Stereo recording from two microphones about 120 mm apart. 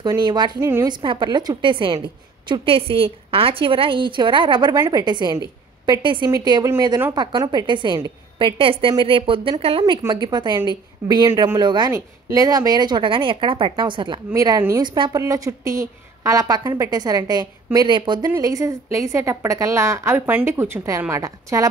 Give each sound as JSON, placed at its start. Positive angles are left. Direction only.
{"t": 0.0, "sound": "a woman's voice", "side_deg": -35}
{"t": 4.7, "sound": "a woman's voice", "side_deg": -25}
{"t": 5.0, "sound": "a woman's voice", "side_deg": -40}
{"t": 11.9, "sound": "a woman's voice", "side_deg": -25}
{"t": 14.3, "sound": "a woman's voice", "side_deg": -30}
{"t": 18.3, "sound": "a woman's voice", "side_deg": -25}